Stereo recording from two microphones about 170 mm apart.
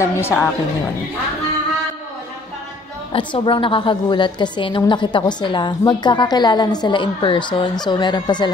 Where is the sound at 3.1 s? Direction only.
30° left (ahead or behind).